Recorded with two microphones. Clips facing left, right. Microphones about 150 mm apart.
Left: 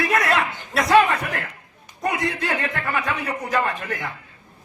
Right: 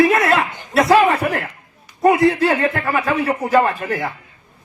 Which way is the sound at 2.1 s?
30° right (ahead or behind).